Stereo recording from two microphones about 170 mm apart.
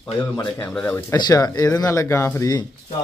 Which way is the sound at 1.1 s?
25° left (ahead or behind).